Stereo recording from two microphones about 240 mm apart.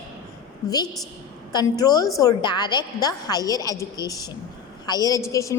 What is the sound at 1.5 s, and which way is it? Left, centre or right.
A woman's voice, centre.